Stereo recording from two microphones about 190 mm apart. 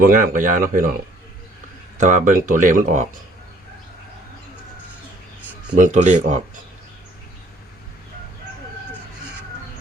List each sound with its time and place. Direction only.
0.0 s speech: 45° right (ahead or behind)
2.0 s speech: 40° right (ahead or behind)
5.7 s speech: 40° right (ahead or behind)